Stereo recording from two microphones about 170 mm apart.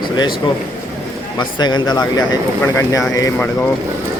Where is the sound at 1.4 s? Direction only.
25° left (ahead or behind).